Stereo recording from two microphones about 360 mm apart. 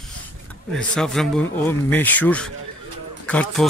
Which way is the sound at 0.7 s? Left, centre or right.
Centre.